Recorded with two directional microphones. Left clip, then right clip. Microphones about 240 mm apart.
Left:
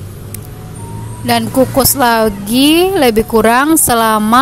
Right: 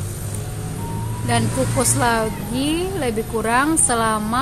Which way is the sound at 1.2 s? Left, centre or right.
Left.